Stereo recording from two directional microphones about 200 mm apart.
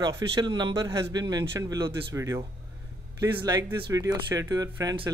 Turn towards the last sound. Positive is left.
turn(degrees=-20)  # may be behind; listen again after turning